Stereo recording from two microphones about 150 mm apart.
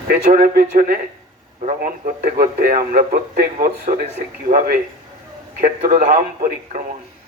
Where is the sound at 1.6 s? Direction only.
55° right (ahead or behind).